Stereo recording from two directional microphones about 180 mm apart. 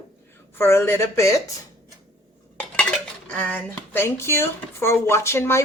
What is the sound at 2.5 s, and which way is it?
Dishes, 5° left (ahead or behind).